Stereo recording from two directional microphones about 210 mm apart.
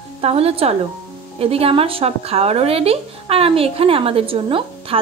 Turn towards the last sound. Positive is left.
turn(degrees=-25)  # may be behind; listen again after turning